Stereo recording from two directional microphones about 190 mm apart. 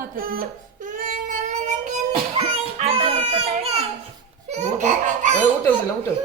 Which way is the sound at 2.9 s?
30° right (ahead or behind).